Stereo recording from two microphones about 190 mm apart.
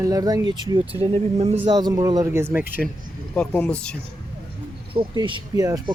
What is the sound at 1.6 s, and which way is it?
Speech, 20° right (ahead or behind).